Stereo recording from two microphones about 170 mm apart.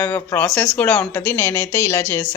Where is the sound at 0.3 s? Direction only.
5° left (ahead or behind).